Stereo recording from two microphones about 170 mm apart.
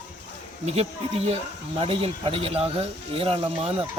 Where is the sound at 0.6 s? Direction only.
35° right (ahead or behind).